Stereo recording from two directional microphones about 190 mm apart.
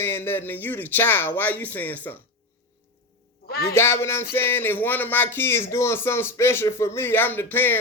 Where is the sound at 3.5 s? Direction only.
55° left (ahead or behind).